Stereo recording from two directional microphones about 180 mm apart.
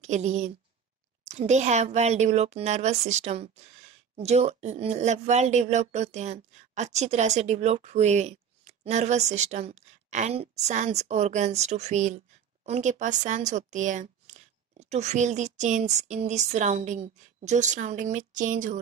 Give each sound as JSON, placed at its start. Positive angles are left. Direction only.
{"t": 0.0, "sound": "a woman's voice", "side_deg": -40}